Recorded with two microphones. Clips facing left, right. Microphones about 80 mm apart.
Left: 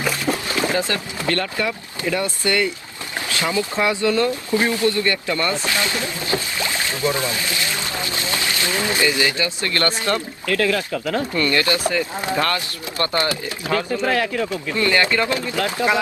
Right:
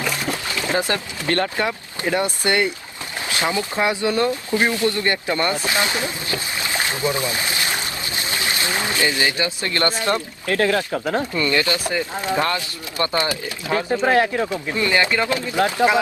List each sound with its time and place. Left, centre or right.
0.3 s boat: left
0.7 s speech: right
3.2 s boat: right
3.8 s speech: right
6.6 s rowboat: right
7.3 s pour: right
9.0 s speech: right